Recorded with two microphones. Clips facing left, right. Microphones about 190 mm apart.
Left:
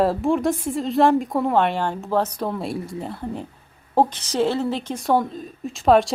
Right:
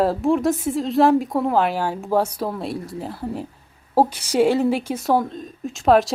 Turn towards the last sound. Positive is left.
turn(degrees=0)  # may be behind; listen again after turning